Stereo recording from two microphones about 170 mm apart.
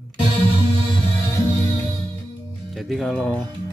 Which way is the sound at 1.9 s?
30° right (ahead or behind).